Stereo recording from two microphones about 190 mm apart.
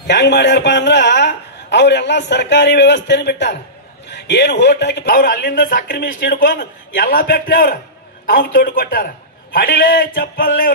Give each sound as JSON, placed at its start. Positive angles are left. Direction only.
{"t": 0.0, "sound": "a man's voice", "side_deg": 65}
{"t": 5.0, "sound": "a man's voice", "side_deg": 50}